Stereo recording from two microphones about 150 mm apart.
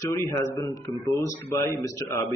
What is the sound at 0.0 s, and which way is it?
A man's voice, 20° left (ahead or behind).